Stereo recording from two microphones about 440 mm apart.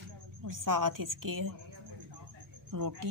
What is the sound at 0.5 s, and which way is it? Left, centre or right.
Speech, right.